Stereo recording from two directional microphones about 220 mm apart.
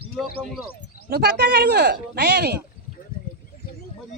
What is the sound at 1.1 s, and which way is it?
Speech, 50° right (ahead or behind).